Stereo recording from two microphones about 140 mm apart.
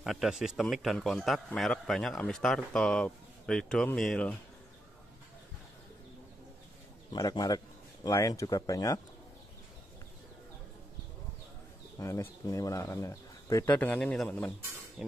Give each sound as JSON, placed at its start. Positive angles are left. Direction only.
{"t": 0.0, "sound": "speech", "side_deg": 0}
{"t": 7.1, "sound": "speech", "side_deg": 30}
{"t": 12.0, "sound": "speech", "side_deg": 20}
{"t": 13.7, "sound": "speech", "side_deg": 10}
{"t": 15.0, "sound": "a sound", "side_deg": -5}